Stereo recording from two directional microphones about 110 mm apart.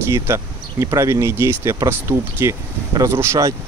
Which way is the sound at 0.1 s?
25° right (ahead or behind).